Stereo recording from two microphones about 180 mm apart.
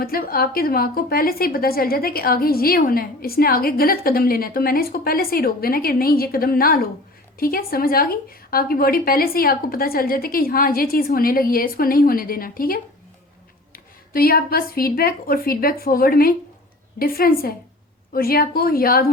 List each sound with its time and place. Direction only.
0.0 s a woman's voice: 55° left (ahead or behind)